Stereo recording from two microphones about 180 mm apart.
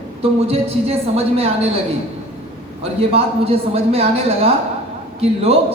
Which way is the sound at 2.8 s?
35° right (ahead or behind).